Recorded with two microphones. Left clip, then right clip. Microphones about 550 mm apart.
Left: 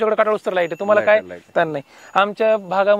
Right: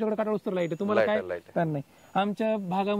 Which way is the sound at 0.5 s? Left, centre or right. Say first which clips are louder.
Left 8 dB; left.